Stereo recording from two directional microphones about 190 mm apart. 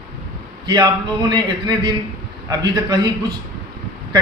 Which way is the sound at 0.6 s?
20° right (ahead or behind).